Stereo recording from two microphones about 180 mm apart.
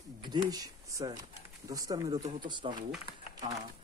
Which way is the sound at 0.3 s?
20° right (ahead or behind).